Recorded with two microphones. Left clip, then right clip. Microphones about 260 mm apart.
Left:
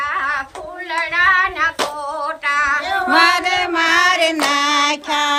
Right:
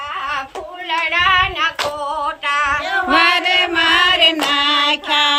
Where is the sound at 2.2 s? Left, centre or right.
Centre.